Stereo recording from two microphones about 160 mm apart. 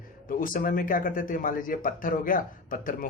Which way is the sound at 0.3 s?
60° left (ahead or behind).